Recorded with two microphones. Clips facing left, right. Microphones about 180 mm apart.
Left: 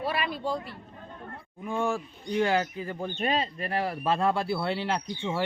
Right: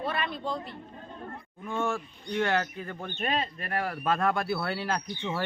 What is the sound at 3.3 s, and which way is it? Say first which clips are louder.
Speech: left 2 dB; 30° left (ahead or behind).